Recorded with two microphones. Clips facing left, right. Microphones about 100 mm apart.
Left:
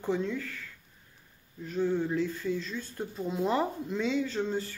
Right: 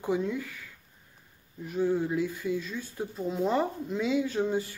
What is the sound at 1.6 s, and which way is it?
Speech, 15° right (ahead or behind).